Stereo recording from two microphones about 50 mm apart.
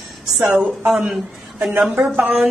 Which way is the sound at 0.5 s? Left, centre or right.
Right.